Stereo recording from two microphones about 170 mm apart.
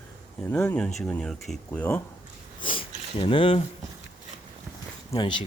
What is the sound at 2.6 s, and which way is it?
Sniff, 30° left (ahead or behind).